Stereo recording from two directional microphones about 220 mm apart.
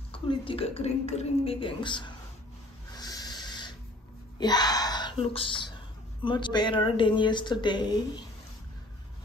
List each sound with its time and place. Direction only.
0.1 s a woman's voice: 25° left (ahead or behind)
3.0 s a sound: 20° left (ahead or behind)
4.4 s a woman's voice: 20° left (ahead or behind)